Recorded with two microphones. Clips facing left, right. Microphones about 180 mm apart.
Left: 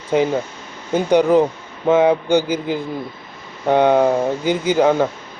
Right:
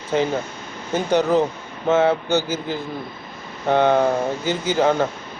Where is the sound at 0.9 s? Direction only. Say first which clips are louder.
Left 4 dB; 10° left (ahead or behind).